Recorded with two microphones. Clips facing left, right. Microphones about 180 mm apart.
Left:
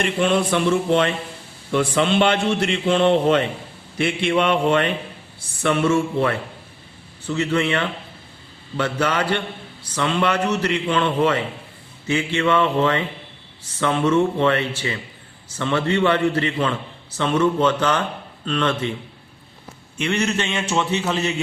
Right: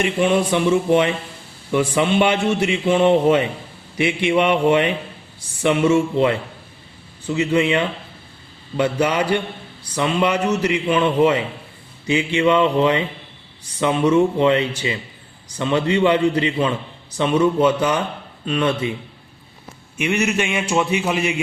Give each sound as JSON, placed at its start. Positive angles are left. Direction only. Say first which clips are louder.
{"t": 0.0, "sound": "a man's voice", "louder": "right 2 dB", "side_deg": -15}
{"t": 20.0, "sound": "a man's voice", "louder": "right 2 dB", "side_deg": -10}